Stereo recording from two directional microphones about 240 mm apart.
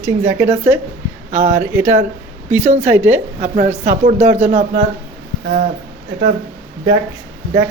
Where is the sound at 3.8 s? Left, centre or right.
Right.